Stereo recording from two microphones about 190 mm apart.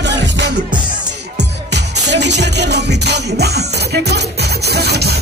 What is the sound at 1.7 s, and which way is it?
Music, 65° right (ahead or behind).